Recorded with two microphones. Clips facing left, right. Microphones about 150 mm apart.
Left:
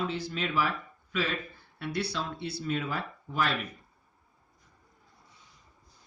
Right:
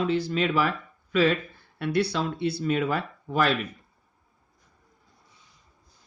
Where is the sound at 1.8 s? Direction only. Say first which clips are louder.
Right 8 dB; 65° right (ahead or behind).